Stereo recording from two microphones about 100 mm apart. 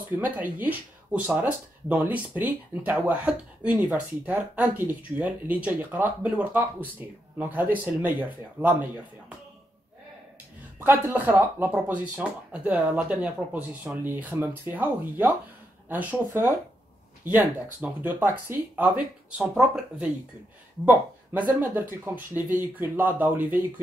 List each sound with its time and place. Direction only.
0.2 s speech: 15° right (ahead or behind)
10.8 s speech: 20° right (ahead or behind)